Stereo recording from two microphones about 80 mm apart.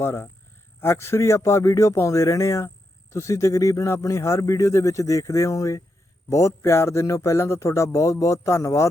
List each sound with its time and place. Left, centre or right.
0.0 s speech: left